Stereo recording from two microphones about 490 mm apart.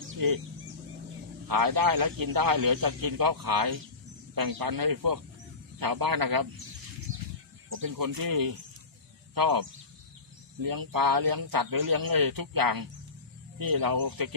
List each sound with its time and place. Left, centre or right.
0.2 s speech: right
1.5 s a man's voice: right
7.8 s a man's voice: right